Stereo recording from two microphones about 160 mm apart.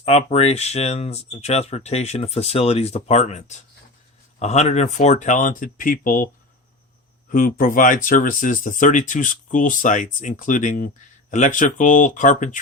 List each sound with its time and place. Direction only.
0.0 s speech: 40° left (ahead or behind); by 6.2 s 60° left (ahead or behind)
7.3 s speech: 60° left (ahead or behind)